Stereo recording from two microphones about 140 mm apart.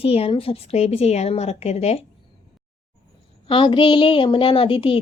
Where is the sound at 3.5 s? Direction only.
40° left (ahead or behind).